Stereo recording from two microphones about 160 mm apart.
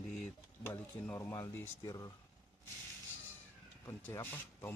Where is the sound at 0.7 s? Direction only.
15° left (ahead or behind).